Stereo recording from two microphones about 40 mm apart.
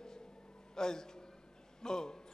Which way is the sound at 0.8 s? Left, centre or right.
Centre.